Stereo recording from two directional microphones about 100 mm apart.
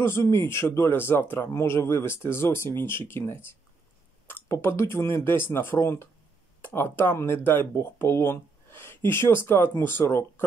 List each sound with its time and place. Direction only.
0.0 s speech: 25° left (ahead or behind)